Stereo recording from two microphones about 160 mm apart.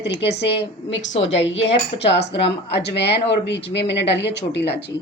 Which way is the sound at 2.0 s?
90° left.